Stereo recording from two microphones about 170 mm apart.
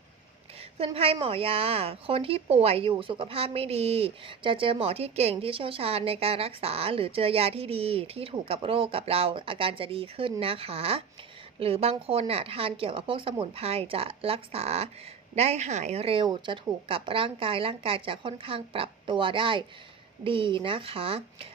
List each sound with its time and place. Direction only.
0.9 s speech: 35° right (ahead or behind)